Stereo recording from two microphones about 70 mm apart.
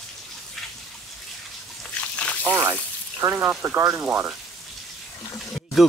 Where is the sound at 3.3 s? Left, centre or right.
Right.